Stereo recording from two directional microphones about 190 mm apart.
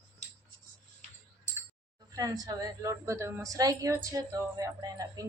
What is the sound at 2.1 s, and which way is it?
A woman's voice, 20° right (ahead or behind).